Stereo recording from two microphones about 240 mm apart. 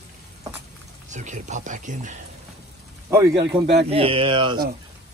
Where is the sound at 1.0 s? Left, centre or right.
Right.